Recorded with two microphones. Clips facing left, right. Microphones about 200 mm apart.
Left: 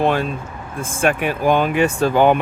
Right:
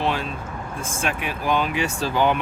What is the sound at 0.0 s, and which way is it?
Speech, 50° left (ahead or behind).